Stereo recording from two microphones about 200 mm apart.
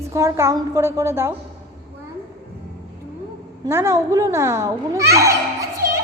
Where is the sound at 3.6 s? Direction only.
15° right (ahead or behind).